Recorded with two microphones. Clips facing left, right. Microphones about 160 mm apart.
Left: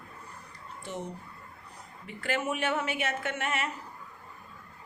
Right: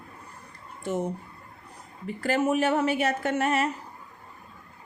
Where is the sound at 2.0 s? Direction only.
40° right (ahead or behind).